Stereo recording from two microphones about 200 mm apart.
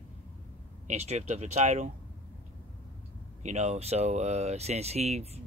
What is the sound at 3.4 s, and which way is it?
Speech, 35° right (ahead or behind).